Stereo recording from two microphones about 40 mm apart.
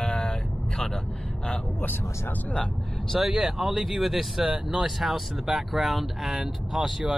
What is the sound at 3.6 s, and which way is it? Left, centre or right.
Speech, centre.